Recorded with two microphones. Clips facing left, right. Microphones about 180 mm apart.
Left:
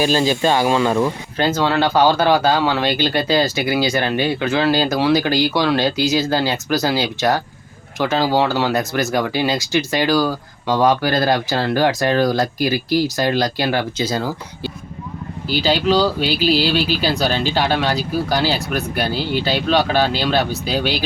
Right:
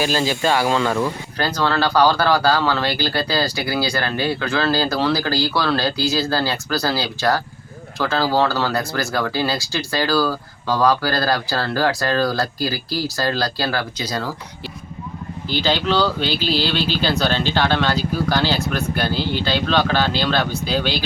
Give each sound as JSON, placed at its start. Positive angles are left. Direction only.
{"t": 0.0, "sound": "speech", "side_deg": 20}
{"t": 15.4, "sound": "speech", "side_deg": 10}